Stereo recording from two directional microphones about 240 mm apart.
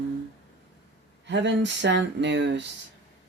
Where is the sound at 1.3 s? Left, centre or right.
Right.